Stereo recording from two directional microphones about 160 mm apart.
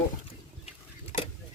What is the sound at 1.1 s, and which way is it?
Vehicle, 55° left (ahead or behind).